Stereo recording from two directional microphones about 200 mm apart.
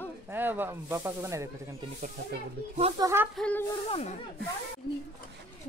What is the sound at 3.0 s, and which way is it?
Speech, 15° right (ahead or behind).